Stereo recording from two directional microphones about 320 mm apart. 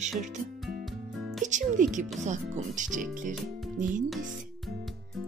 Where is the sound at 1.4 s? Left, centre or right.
Right.